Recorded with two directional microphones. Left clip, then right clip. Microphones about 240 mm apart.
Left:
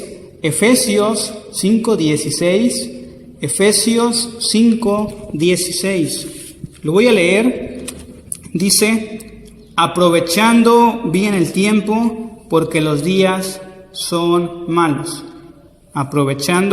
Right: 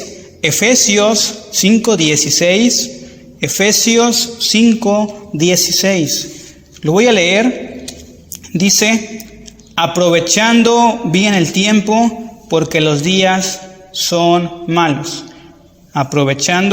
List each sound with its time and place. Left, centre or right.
0.4 s a man's voice: centre
8.3 s a sound: centre
9.7 s a man's voice: centre